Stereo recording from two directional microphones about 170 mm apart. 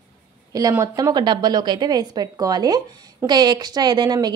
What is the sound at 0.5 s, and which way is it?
A woman's voice, 20° right (ahead or behind).